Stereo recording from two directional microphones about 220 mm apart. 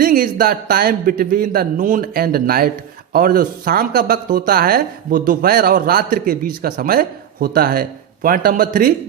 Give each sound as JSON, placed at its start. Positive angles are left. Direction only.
{"t": 0.0, "sound": "speech", "side_deg": -40}